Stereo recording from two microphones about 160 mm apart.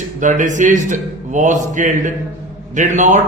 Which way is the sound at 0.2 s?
50° right (ahead or behind).